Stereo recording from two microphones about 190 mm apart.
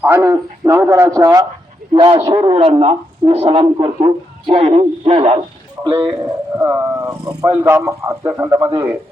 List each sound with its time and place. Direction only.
0.0 s a man's voice: 15° right (ahead or behind)
6.6 s speech: 10° right (ahead or behind)